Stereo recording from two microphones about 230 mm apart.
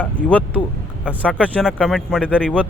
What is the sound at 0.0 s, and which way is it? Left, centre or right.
Speech, centre.